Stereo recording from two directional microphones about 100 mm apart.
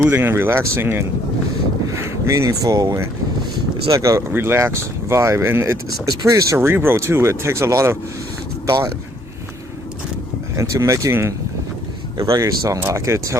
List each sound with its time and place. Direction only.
0.0 s speech: 20° right (ahead or behind)
4.3 s speech: 25° right (ahead or behind)
10.6 s speech: 30° right (ahead or behind)